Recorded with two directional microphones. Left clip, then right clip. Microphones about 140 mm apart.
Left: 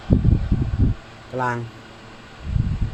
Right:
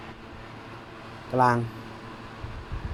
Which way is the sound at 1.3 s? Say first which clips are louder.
Right 2 dB; 15° right (ahead or behind).